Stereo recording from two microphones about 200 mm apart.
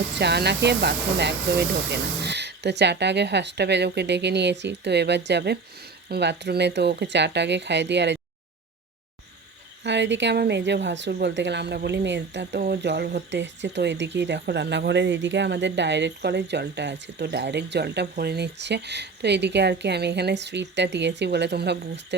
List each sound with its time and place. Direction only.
0.2 s a woman's voice: 55° right (ahead or behind)
9.8 s a woman's voice: 60° right (ahead or behind)